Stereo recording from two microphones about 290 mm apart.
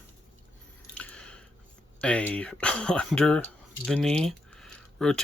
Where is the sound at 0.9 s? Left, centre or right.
Centre.